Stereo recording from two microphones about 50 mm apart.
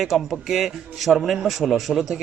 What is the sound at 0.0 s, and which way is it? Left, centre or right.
A man's voice, centre.